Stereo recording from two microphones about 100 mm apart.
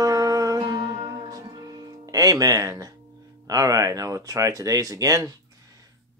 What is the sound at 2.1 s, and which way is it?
Music, 40° right (ahead or behind).